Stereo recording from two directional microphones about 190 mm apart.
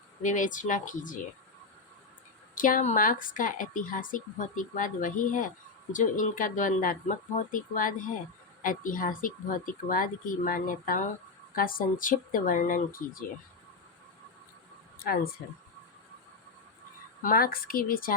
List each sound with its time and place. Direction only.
0.2 s a woman's voice: 40° left (ahead or behind)
2.6 s a woman's voice: 45° left (ahead or behind)
14.9 s speech: 50° left (ahead or behind)
17.2 s a woman's voice: 50° left (ahead or behind)